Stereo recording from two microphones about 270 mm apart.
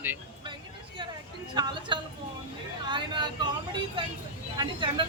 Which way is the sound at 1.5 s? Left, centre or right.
Centre.